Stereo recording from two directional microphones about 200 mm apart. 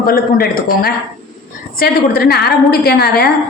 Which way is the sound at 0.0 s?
45° left (ahead or behind).